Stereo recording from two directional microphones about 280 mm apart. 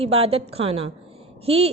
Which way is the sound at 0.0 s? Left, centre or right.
Right.